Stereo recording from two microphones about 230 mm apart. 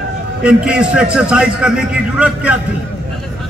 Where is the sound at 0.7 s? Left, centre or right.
Centre.